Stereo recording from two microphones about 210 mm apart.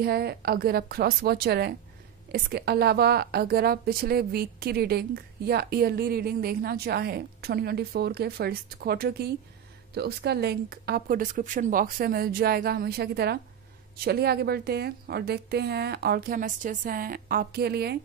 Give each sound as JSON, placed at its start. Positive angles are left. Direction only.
{"t": 0.0, "sound": "a woman's voice", "side_deg": -50}